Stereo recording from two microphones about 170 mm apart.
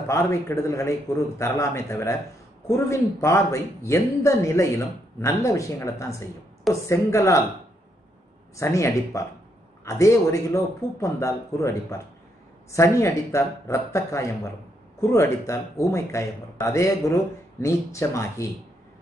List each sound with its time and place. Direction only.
0.1 s speech: 15° left (ahead or behind)
8.5 s speech: 15° left (ahead or behind)